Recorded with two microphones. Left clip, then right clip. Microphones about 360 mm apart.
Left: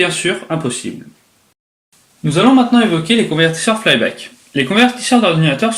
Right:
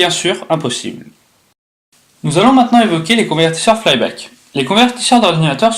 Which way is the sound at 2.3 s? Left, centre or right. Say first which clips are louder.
Right 2 dB; centre.